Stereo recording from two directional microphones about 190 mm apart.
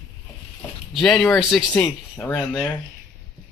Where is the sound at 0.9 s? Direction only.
Centre (ahead or behind).